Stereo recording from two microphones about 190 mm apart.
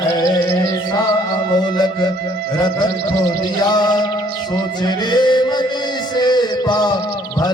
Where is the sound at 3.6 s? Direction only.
20° left (ahead or behind).